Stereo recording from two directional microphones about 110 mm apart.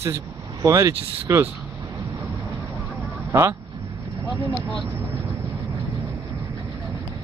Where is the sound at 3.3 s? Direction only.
25° right (ahead or behind).